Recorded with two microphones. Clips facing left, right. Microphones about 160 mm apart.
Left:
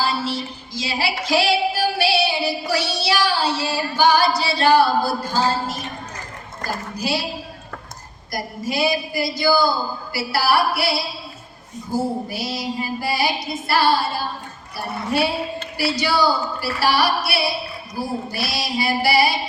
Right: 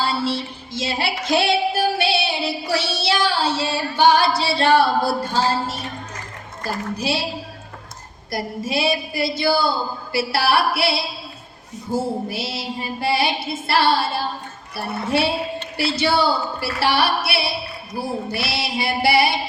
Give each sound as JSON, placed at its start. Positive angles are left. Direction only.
{"t": 0.0, "sound": "music", "side_deg": -25}
{"t": 6.9, "sound": "music", "side_deg": -25}
{"t": 8.3, "sound": "music", "side_deg": -25}
{"t": 15.8, "sound": "music", "side_deg": -25}